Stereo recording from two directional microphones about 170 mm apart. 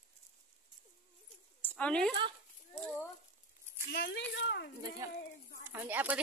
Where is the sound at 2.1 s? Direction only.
30° right (ahead or behind).